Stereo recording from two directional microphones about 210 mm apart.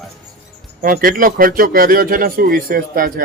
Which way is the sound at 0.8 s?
40° right (ahead or behind).